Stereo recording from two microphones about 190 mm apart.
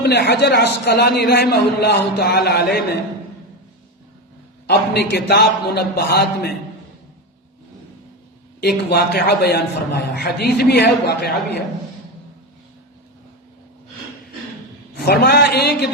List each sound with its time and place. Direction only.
0.0 s a man's voice: 65° left (ahead or behind)
4.6 s a man's voice: 60° left (ahead or behind)
8.6 s a man's voice: 60° left (ahead or behind)
14.9 s a man's voice: 55° left (ahead or behind)